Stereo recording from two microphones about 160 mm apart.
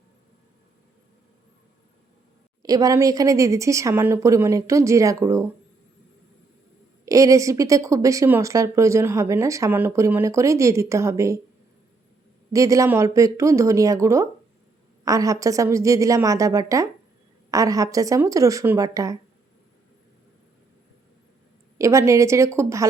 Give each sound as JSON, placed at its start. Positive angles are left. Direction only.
{"t": 2.6, "sound": "speech", "side_deg": -25}
{"t": 7.0, "sound": "speech", "side_deg": -20}
{"t": 12.5, "sound": "speech", "side_deg": -20}
{"t": 21.8, "sound": "speech", "side_deg": -20}